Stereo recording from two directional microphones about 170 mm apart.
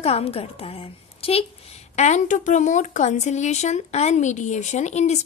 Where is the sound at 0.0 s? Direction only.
35° left (ahead or behind).